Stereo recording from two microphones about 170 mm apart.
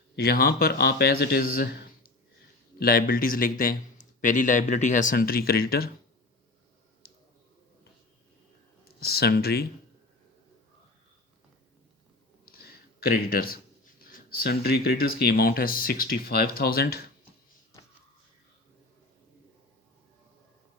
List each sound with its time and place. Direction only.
0.2 s speech: 65° left (ahead or behind)
2.7 s speech: 60° left (ahead or behind)
9.0 s speech: 65° left (ahead or behind)
12.5 s a sound: 65° left (ahead or behind)
14.0 s speech: 60° left (ahead or behind)